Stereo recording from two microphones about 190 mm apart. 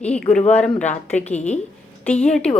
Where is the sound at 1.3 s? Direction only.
35° left (ahead or behind).